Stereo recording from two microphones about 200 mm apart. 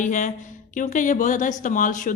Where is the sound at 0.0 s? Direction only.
40° left (ahead or behind).